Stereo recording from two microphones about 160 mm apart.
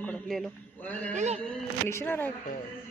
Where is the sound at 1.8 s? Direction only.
15° left (ahead or behind).